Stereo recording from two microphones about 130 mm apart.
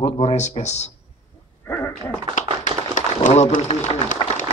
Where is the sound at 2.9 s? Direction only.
70° left (ahead or behind).